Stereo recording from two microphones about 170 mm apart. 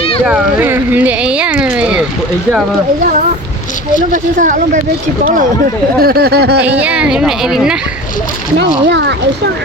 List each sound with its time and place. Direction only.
0.3 s speech: 10° right (ahead or behind)
4.1 s speech: 50° right (ahead or behind)
6.0 s speech: 65° right (ahead or behind)
6.6 s a woman's voice: 10° right (ahead or behind)
8.5 s speech: 90° right